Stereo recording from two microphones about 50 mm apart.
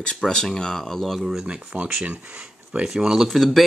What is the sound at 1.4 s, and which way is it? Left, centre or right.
Speech, right.